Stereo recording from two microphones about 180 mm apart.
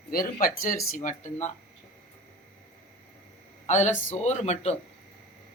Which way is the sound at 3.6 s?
40° left (ahead or behind).